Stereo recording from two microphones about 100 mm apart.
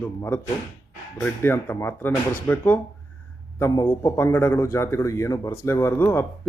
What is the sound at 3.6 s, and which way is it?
Speech, 35° left (ahead or behind).